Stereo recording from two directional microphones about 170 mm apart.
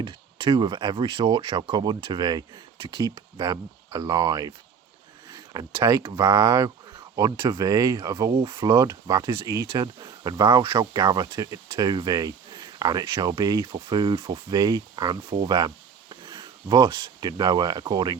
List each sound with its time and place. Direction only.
0.0 s speech: 25° right (ahead or behind)
5.5 s speech: 15° right (ahead or behind)
6.9 s a sound: 20° right (ahead or behind)
7.5 s speech: 20° right (ahead or behind)
14.5 s speech: 20° right (ahead or behind)
15.4 s a sound: 25° right (ahead or behind)
16.6 s speech: 25° right (ahead or behind)